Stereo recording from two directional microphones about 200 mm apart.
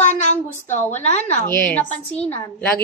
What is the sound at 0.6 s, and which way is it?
Speech, 35° left (ahead or behind).